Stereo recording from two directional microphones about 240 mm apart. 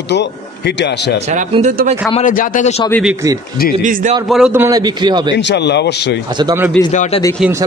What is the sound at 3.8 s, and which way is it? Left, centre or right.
Speech, right.